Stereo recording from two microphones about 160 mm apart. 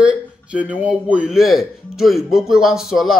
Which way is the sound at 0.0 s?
10° right (ahead or behind).